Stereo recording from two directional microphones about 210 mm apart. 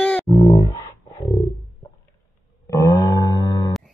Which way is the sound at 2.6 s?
15° left (ahead or behind).